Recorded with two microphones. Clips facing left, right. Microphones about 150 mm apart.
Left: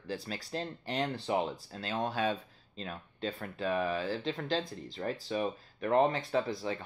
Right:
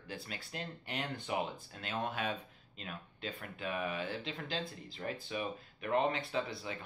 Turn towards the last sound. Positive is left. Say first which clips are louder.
# left 6 dB
turn(degrees=40)  # may be behind; listen again after turning